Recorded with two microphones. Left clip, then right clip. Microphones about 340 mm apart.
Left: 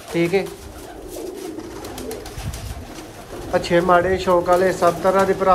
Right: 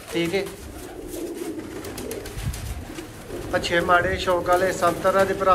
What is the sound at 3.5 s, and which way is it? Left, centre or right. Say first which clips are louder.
Speech: left 4 dB; left.